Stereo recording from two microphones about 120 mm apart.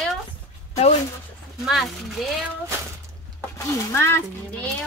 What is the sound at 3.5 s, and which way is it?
Speech, 25° left (ahead or behind).